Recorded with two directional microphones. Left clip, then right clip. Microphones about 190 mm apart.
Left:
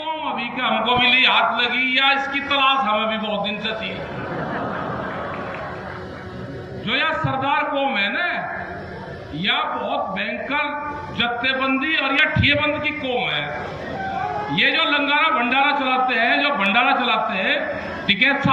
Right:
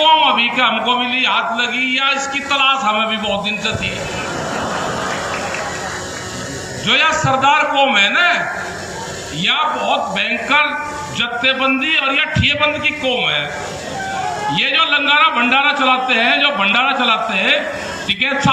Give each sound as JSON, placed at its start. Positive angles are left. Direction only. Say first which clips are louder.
{"t": 0.0, "sound": "speech", "louder": "right 14 dB", "side_deg": -60}
{"t": 6.8, "sound": "speech", "louder": "right 7 dB", "side_deg": -65}
{"t": 9.4, "sound": "speech", "louder": "right 5 dB", "side_deg": -60}
{"t": 14.5, "sound": "speech", "louder": "right 3 dB", "side_deg": -60}